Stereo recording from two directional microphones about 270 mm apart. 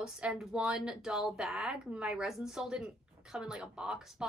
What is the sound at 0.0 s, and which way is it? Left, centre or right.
Speech, centre.